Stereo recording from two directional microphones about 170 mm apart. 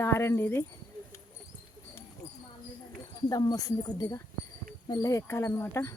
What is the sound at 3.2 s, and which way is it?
Speech, 25° left (ahead or behind).